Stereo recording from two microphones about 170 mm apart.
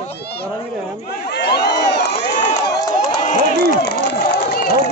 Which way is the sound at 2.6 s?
25° left (ahead or behind).